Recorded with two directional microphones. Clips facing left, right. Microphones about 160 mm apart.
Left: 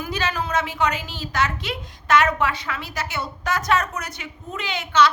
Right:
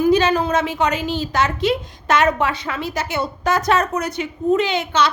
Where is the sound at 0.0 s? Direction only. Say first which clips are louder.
Right 11 dB; 20° right (ahead or behind).